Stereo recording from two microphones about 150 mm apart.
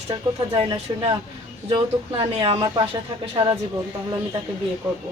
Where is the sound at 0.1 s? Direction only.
30° right (ahead or behind).